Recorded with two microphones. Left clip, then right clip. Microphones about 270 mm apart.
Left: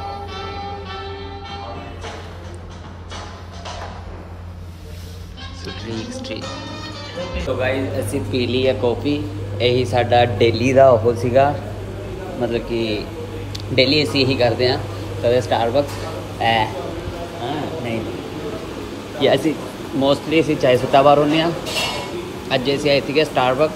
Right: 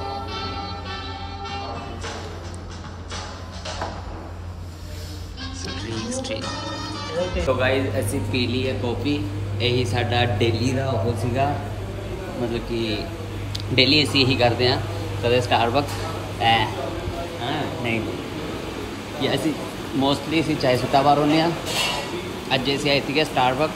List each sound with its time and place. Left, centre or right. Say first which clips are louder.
5.9 s speech: even; centre
7.7 s speech: left 1 dB; centre
13.7 s a sound: left 2 dB; centre
22.1 s speech: left 2 dB; centre